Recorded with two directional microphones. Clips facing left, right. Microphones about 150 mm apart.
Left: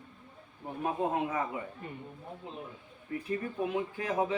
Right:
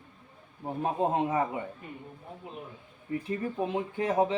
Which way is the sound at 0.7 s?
30° right (ahead or behind).